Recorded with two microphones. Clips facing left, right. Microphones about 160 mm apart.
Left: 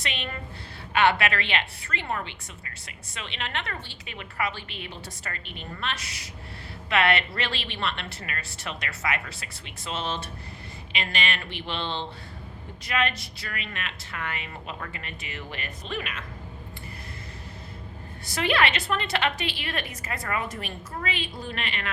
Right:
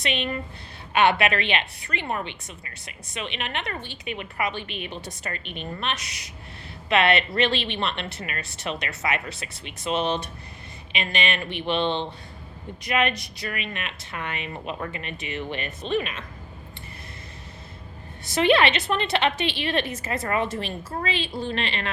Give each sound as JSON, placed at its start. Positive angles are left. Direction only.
{"t": 0.0, "sound": "a woman's voice", "side_deg": -20}
{"t": 18.3, "sound": "a woman's voice", "side_deg": -20}